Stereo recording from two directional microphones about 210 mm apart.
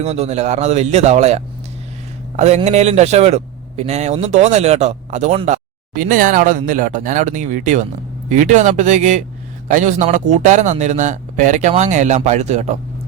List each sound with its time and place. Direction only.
0.0 s a man's voice: 30° right (ahead or behind)